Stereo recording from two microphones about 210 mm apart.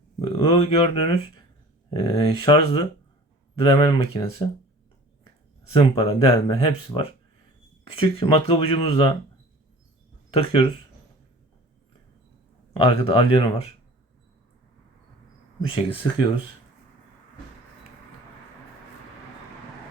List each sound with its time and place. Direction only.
0.2 s speech: 25° left (ahead or behind)
5.2 s a sound: 25° left (ahead or behind)
6.0 s speech: 25° left (ahead or behind)
10.3 s speech: 25° left (ahead or behind)
12.8 s speech: 25° left (ahead or behind)
15.6 s speech: 25° left (ahead or behind)